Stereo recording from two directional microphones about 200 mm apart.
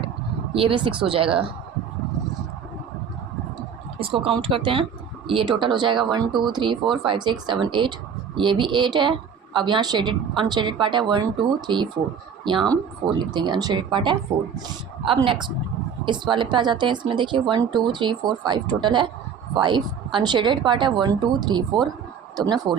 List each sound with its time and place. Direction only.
0.5 s a woman's voice: 25° right (ahead or behind)
4.0 s a woman's voice: 25° right (ahead or behind)